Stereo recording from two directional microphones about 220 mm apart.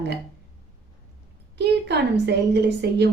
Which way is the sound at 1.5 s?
50° right (ahead or behind).